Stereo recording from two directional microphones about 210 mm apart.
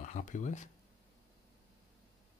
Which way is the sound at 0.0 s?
35° left (ahead or behind).